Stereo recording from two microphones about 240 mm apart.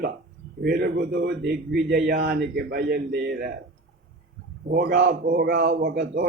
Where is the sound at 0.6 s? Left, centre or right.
Right.